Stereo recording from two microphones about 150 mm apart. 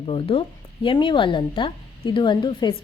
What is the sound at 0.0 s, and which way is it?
A woman's voice, 35° left (ahead or behind).